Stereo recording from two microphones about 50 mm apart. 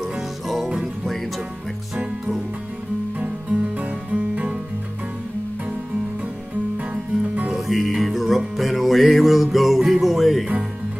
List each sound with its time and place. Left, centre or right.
0.0 s music: centre
3.7 s music: right
6.9 s music: right
7.5 s music: centre